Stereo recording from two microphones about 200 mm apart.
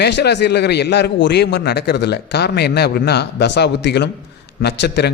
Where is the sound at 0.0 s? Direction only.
55° left (ahead or behind).